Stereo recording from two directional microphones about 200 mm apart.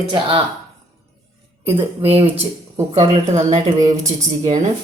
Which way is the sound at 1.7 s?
30° right (ahead or behind).